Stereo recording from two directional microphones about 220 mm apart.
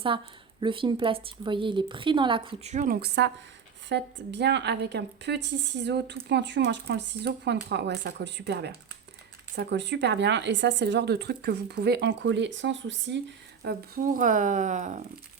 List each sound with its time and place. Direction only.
0.1 s a woman's voice: 25° right (ahead or behind); by 13.1 s 55° right (ahead or behind)
13.6 s speech: 45° right (ahead or behind)